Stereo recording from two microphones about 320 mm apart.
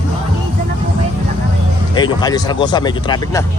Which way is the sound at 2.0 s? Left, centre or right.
Centre.